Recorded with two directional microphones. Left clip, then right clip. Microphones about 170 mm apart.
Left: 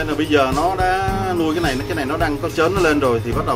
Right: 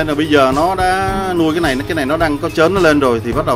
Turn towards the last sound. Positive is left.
turn(degrees=-35)  # may be behind; listen again after turning